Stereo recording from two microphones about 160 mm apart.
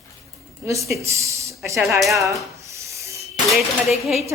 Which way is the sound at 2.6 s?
20° right (ahead or behind).